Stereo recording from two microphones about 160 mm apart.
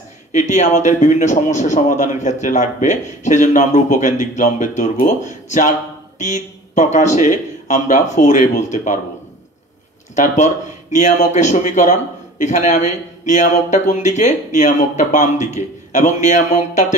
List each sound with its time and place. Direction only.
0.3 s a man's voice: 50° left (ahead or behind)
10.1 s a man's voice: 50° left (ahead or behind)